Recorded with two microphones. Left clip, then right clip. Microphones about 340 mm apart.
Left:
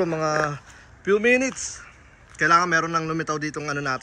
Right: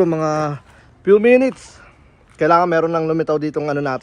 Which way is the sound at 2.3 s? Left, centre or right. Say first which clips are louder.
Right 5 dB; centre.